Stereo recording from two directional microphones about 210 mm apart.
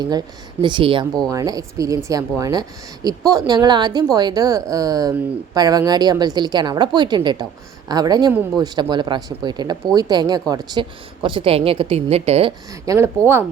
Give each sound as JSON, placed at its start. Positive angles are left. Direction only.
{"t": 0.0, "sound": "speech", "side_deg": -20}